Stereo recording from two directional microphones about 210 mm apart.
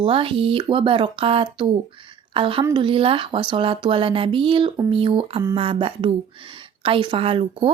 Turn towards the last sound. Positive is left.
turn(degrees=-25)  # may be behind; listen again after turning